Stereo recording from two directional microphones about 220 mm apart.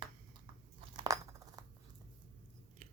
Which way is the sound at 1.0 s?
15° right (ahead or behind).